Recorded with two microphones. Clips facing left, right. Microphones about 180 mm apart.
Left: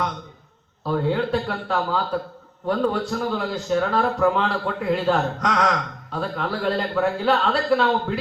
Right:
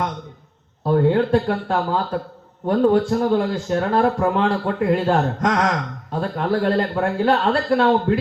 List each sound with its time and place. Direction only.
0.9 s speech: 50° right (ahead or behind)